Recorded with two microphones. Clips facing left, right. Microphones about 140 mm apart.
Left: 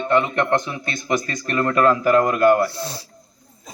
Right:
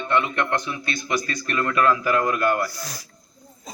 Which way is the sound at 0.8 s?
45° left (ahead or behind).